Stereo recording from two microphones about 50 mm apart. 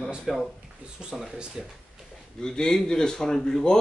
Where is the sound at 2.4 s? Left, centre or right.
Centre.